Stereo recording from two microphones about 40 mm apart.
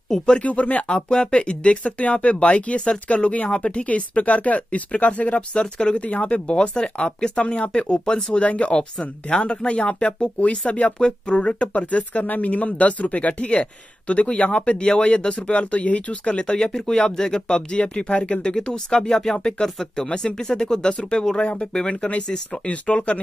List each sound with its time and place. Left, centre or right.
0.4 s speech: left
1.0 s speech: left
5.5 s speech: left
6.0 s speech: left